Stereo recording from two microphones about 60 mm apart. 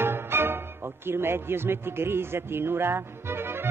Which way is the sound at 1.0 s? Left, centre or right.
Right.